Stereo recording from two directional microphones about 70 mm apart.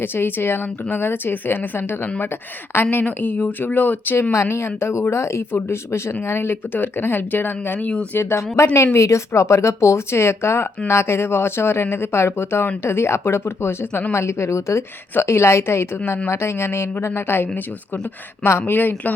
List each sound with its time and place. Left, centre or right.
0.0 s speech: left
8.2 s speech: left